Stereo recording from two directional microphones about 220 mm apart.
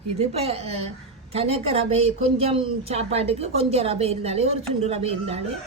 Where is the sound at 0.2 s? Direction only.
30° right (ahead or behind).